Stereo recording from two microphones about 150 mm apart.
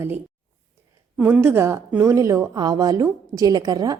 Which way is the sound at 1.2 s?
15° right (ahead or behind).